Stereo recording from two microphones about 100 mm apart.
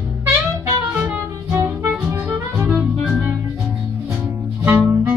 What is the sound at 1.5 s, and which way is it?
Music, 25° right (ahead or behind).